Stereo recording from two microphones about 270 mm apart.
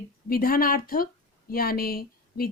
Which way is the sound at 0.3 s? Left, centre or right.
Left.